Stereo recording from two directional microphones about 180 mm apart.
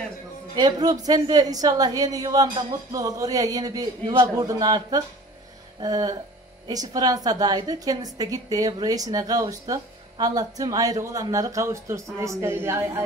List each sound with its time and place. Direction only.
0.6 s a woman's voice: 20° right (ahead or behind)